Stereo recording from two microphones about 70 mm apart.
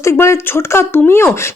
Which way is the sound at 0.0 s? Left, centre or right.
Left.